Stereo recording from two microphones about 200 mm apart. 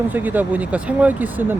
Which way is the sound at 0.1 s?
10° right (ahead or behind).